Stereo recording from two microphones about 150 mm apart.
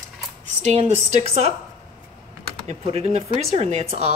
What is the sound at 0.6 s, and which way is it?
Speech, 45° right (ahead or behind).